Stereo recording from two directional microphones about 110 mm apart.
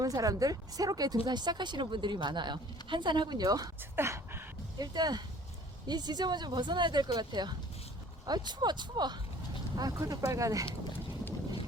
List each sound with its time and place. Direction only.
0.0 s speech: 30° right (ahead or behind)
3.9 s a sound: 20° right (ahead or behind)
4.8 s speech: 40° right (ahead or behind)